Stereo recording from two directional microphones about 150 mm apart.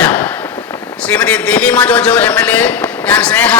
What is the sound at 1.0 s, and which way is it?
A man's voice, 10° left (ahead or behind).